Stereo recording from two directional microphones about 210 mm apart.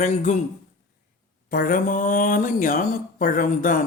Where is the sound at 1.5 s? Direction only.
40° left (ahead or behind).